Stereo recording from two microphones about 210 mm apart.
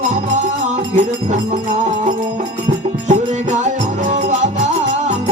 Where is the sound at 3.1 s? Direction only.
35° right (ahead or behind).